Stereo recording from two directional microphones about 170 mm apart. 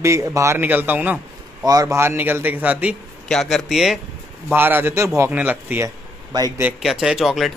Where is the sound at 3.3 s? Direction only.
Centre (ahead or behind).